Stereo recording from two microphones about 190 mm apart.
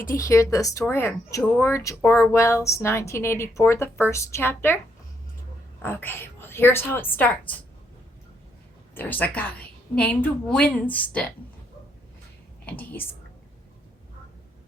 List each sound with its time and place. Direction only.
0.1 s speech: 15° left (ahead or behind)
5.8 s speech: 10° left (ahead or behind)
9.0 s speech: 10° left (ahead or behind)
12.6 s a woman's voice: 10° left (ahead or behind)